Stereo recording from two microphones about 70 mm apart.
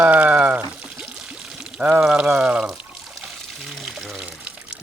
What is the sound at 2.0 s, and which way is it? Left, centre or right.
Pour, centre.